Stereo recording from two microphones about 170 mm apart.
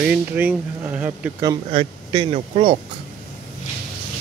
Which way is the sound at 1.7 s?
35° right (ahead or behind).